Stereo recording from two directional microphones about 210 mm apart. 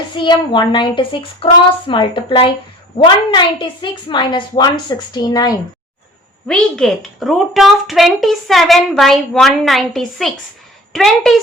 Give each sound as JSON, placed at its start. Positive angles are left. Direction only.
{"t": 0.2, "sound": "a woman's voice", "side_deg": 20}
{"t": 6.5, "sound": "a woman's voice", "side_deg": 5}